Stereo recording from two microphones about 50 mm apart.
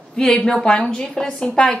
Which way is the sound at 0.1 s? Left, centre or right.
Centre.